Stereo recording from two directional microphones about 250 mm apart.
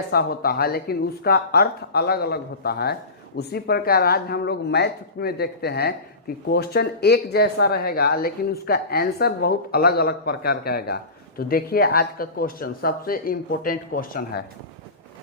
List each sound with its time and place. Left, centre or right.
0.1 s speech: left